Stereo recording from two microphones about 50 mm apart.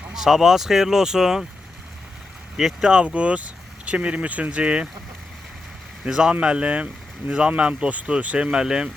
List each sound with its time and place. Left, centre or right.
0.1 s speech: centre
2.6 s speech: centre
6.1 s speech: centre